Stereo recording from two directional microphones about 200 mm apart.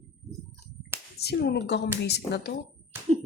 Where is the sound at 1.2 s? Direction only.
55° left (ahead or behind).